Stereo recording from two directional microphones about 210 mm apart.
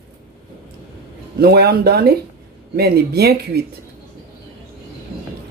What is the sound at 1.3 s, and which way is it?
Speech, 45° right (ahead or behind).